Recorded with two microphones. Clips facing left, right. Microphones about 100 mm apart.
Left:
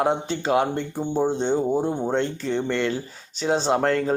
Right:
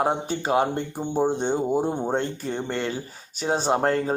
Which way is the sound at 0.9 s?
10° right (ahead or behind).